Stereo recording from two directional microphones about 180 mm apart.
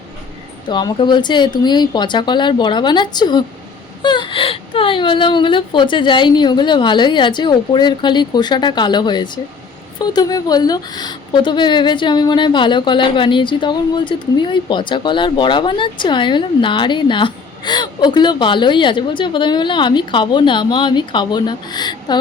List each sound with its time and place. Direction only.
0.7 s a woman's voice: 25° left (ahead or behind)